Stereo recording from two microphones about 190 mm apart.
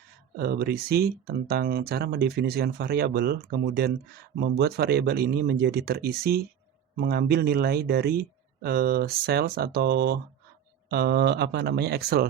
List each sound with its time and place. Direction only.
0.3 s speech: 55° right (ahead or behind)